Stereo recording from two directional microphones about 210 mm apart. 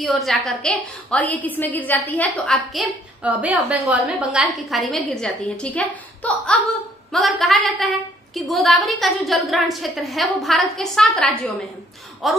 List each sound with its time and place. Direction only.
0.0 s a woman's voice: centre (ahead or behind)